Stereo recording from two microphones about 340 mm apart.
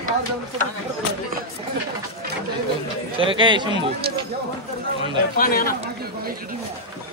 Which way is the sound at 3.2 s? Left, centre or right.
Centre.